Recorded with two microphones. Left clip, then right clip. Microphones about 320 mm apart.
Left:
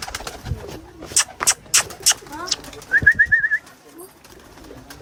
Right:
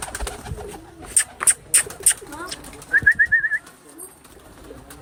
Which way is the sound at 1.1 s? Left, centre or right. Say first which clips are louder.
Left 3 dB; centre.